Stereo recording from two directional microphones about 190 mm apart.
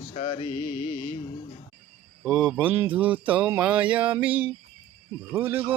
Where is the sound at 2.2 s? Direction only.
5° right (ahead or behind).